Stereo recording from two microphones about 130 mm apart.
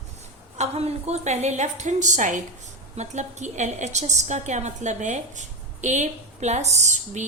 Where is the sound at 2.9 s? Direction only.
65° right (ahead or behind).